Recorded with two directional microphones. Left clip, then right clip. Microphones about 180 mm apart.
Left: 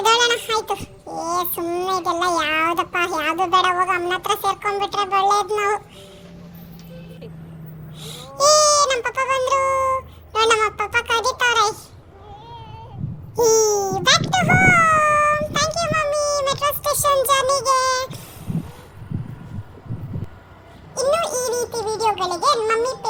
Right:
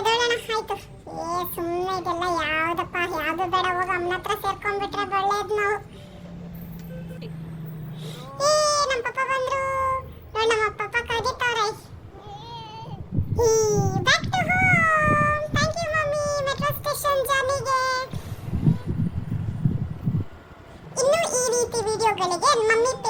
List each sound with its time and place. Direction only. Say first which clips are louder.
0.0 s child singing: left 5 dB; 25° left (ahead or behind)
8.0 s music: left 6 dB; 25° left (ahead or behind)
13.3 s baby cry: left 4 dB; 25° left (ahead or behind)
21.0 s a sound: left 1 dB; 10° left (ahead or behind)